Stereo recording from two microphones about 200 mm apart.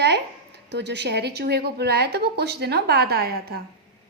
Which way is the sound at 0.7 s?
60° right (ahead or behind).